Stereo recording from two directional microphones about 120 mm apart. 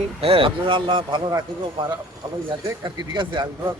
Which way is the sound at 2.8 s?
40° right (ahead or behind).